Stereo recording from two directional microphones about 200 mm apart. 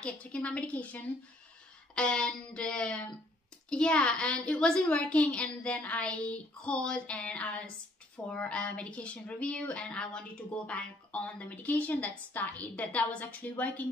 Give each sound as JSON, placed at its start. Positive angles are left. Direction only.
{"t": 0.0, "sound": "a woman's voice", "side_deg": 5}